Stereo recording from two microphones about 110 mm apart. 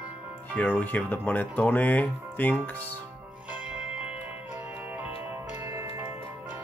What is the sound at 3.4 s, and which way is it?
Music, 10° right (ahead or behind).